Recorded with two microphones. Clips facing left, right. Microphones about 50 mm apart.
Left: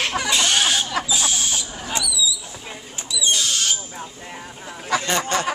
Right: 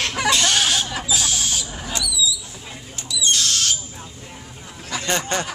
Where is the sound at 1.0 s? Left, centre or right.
Centre.